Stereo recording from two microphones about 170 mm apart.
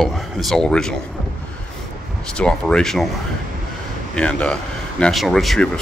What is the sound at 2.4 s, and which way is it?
Speech, 5° left (ahead or behind).